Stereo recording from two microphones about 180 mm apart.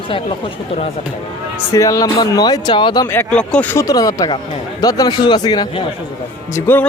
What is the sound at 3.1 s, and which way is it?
A man's voice, 10° left (ahead or behind).